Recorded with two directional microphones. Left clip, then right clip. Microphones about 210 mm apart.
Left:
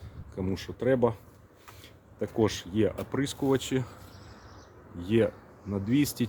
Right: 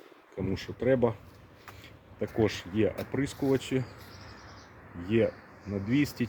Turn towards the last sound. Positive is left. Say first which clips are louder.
# left 1 dB
turn(degrees=15)  # may be behind; listen again after turning